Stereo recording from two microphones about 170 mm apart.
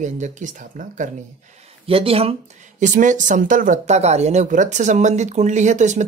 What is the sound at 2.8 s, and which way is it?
Speech, 45° right (ahead or behind).